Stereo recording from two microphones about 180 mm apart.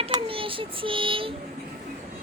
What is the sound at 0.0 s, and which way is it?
A child's voice, 30° right (ahead or behind).